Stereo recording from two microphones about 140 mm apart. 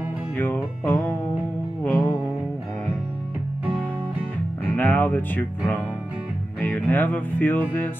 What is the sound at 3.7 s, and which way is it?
Music, 10° left (ahead or behind).